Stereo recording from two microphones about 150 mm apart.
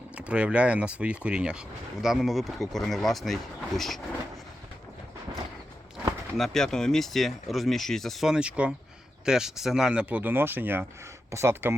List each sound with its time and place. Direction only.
0.2 s speech: 10° right (ahead or behind)
6.3 s speech: centre (ahead or behind); by 11.8 s 15° right (ahead or behind)